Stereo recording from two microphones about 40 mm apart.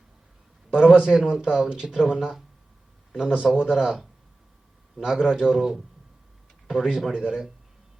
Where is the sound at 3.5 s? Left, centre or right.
Centre.